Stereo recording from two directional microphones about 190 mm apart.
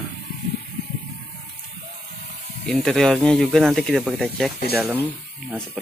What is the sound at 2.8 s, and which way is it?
Speech, centre (ahead or behind).